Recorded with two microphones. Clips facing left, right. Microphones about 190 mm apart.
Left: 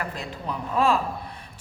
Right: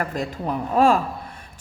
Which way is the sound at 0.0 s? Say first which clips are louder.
Right 6 dB; 45° right (ahead or behind).